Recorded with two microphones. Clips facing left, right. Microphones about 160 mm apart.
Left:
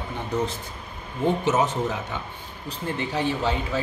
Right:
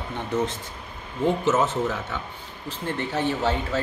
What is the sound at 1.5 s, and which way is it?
Speech, 15° left (ahead or behind).